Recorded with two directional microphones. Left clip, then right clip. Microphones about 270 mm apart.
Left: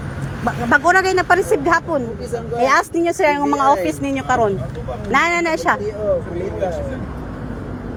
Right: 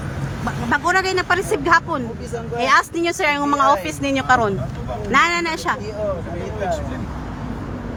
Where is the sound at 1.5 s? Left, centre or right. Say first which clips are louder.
Left 1 dB; centre.